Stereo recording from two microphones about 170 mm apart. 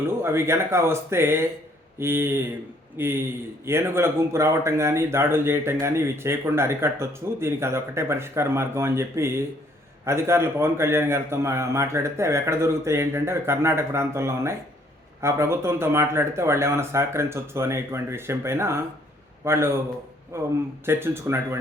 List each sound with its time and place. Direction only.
0.2 s a man's voice: 15° right (ahead or behind)